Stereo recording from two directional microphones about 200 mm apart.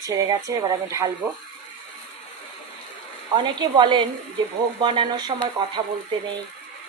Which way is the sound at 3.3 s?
25° right (ahead or behind).